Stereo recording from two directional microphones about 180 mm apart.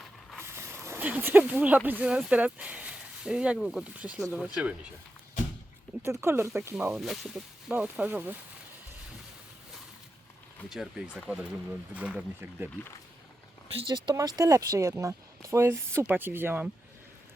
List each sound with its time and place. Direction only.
0.3 s speech: 15° right (ahead or behind)
6.0 s speech: 15° right (ahead or behind)
10.7 s speech: 5° right (ahead or behind)
13.7 s speech: 25° right (ahead or behind)